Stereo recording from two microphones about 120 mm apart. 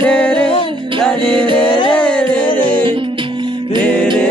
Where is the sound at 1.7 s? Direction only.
45° left (ahead or behind).